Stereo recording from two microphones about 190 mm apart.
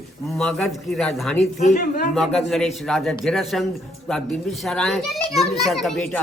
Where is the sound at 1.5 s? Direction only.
40° left (ahead or behind).